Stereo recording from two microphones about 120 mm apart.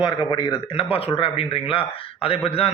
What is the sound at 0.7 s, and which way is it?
A man's voice, 55° left (ahead or behind).